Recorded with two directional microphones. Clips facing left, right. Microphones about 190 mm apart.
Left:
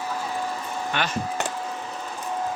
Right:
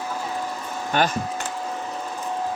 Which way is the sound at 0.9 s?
40° right (ahead or behind).